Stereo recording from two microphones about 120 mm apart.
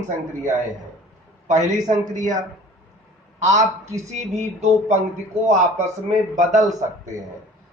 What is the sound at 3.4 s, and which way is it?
Speech, 80° right.